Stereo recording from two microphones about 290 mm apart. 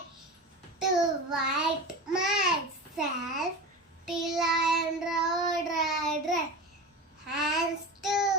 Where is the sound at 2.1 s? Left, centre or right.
Centre.